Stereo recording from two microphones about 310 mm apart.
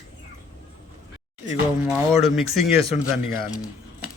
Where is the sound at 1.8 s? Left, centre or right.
Centre.